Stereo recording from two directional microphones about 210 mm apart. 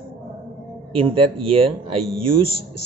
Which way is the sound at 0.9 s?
25° right (ahead or behind).